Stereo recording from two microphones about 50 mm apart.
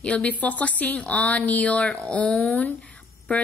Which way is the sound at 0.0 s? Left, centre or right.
Left.